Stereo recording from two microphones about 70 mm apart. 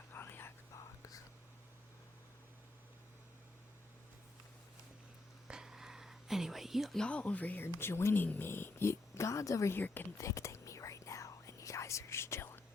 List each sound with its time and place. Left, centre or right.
0.1 s whispering: left
0.7 s whispering: left
5.5 s whispering: centre
7.0 s speech: centre
7.6 s speech: left
9.7 s speech: left
10.2 s whispering: left